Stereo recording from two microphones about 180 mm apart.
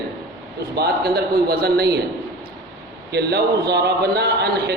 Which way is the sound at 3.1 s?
65° right (ahead or behind).